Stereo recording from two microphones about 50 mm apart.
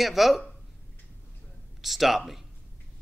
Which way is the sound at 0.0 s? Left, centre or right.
Centre.